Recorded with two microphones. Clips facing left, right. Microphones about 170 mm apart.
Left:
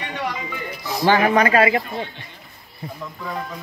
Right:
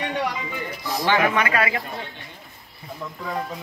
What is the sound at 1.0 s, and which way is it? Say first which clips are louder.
Speech: left 5 dB; 40° left (ahead or behind).